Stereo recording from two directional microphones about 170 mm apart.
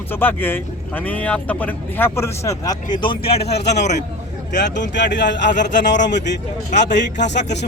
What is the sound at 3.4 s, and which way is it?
A man's voice, 80° left.